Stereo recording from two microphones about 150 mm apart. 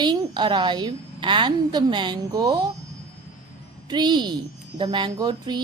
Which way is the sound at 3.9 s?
30° right (ahead or behind).